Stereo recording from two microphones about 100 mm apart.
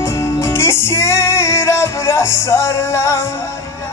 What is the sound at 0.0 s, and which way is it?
Music, 30° left (ahead or behind).